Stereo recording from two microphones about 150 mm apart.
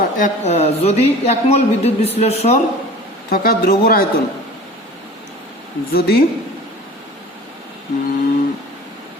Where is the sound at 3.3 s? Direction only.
80° left.